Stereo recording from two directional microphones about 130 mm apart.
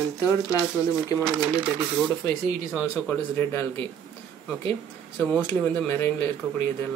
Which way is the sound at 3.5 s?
20° left (ahead or behind).